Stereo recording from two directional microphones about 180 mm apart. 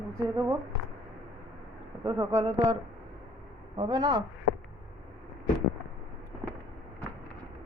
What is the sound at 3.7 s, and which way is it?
Speech, 25° right (ahead or behind).